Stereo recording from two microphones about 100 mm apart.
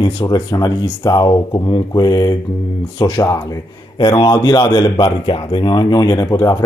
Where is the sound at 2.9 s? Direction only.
50° left (ahead or behind).